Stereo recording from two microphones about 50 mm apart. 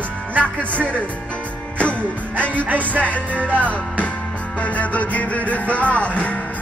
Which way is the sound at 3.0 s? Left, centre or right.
Left.